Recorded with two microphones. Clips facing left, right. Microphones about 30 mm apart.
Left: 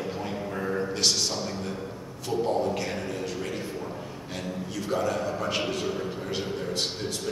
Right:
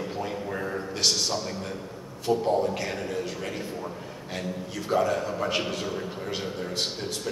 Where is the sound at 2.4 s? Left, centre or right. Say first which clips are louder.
Right 1 dB; centre.